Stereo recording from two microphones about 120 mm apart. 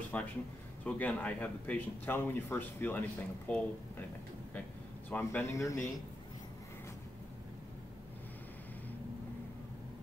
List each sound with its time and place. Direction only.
0.1 s speech: 15° left (ahead or behind)
5.1 s speech: 20° left (ahead or behind)